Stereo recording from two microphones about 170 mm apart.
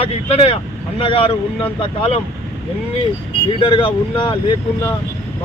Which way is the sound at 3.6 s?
30° left (ahead or behind).